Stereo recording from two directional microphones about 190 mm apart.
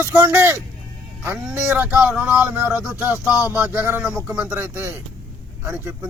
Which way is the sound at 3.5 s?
10° right (ahead or behind).